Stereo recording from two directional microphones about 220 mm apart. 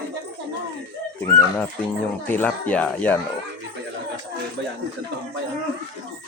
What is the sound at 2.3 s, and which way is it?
Speech, 10° left (ahead or behind).